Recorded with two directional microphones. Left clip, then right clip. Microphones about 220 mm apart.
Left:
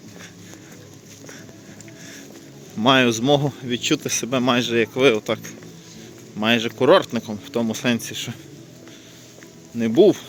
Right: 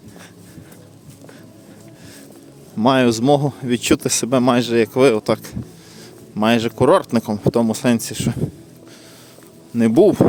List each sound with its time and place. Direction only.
2.7 s speech: 20° right (ahead or behind)
9.7 s speech: 35° right (ahead or behind)